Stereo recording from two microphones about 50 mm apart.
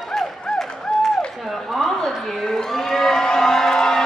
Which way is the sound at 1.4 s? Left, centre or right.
Centre.